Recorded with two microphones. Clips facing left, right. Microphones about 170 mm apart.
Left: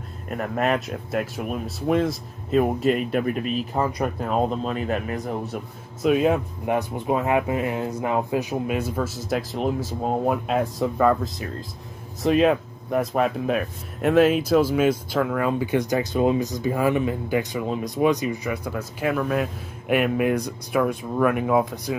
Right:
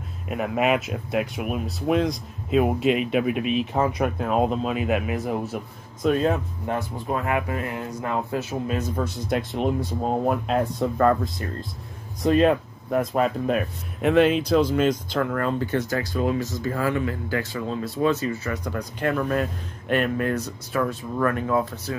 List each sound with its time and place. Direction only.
0.3 s speech: 5° right (ahead or behind)
6.0 s speech: 10° left (ahead or behind)